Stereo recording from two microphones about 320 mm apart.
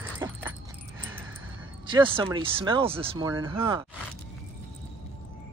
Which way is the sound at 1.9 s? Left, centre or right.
Centre.